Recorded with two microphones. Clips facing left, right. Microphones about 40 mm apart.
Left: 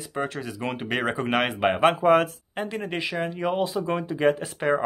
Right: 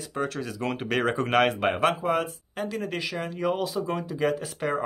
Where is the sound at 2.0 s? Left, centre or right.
Left.